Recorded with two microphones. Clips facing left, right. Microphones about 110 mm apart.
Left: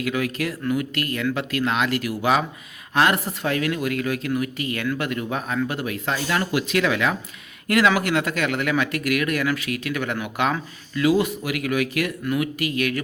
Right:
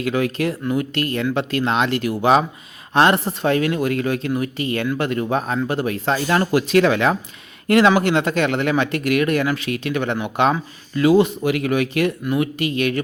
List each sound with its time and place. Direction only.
0.0 s speech: 30° right (ahead or behind)